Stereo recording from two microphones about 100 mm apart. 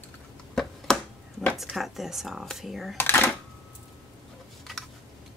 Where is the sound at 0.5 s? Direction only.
5° left (ahead or behind).